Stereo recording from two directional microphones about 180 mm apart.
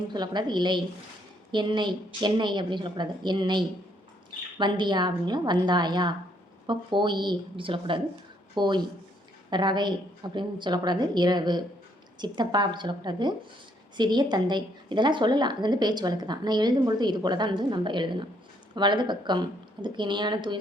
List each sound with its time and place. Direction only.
0.1 s a woman's voice: 25° right (ahead or behind)